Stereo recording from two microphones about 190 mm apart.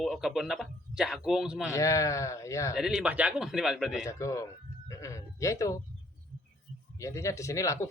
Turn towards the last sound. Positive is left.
turn(degrees=15)  # may be behind; listen again after turning